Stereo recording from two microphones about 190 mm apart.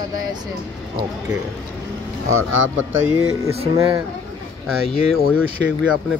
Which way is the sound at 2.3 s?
90° right.